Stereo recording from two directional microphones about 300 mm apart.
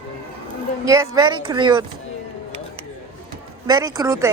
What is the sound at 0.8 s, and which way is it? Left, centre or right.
A woman's voice, centre.